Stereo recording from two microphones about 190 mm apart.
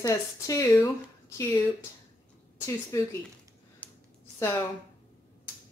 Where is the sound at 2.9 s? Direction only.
15° left (ahead or behind).